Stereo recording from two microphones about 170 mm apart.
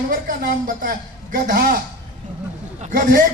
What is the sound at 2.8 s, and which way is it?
Speech, 55° right (ahead or behind).